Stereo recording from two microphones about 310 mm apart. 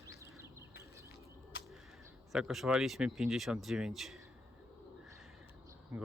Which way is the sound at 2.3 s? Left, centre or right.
Centre.